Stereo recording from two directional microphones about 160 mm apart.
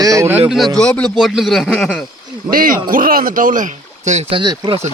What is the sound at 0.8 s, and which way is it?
Speech, 5° left (ahead or behind).